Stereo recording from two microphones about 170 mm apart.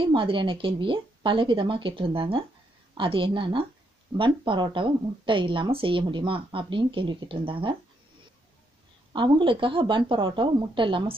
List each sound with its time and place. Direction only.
0.0 s a woman's voice: 30° right (ahead or behind)
9.1 s a woman's voice: 30° right (ahead or behind)